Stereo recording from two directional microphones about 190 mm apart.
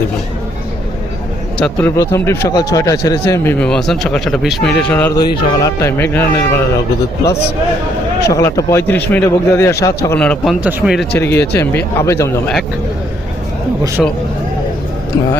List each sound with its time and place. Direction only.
1.5 s speech: 5° left (ahead or behind)
5.1 s speech: 20° left (ahead or behind)
8.4 s speech: 15° left (ahead or behind); by 11.0 s 5° right (ahead or behind)
11.2 s speech: 15° left (ahead or behind)
14.0 s speech: 5° left (ahead or behind)